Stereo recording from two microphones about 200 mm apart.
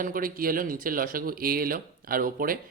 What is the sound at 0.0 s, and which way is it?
Speech, 45° right (ahead or behind).